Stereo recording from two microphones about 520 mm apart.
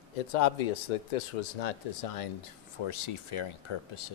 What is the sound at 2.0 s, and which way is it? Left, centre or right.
Speech, left.